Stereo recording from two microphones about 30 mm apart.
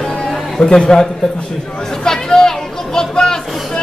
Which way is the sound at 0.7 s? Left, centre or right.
Left.